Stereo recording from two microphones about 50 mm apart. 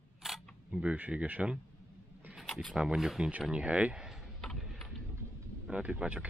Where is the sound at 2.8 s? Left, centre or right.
Centre.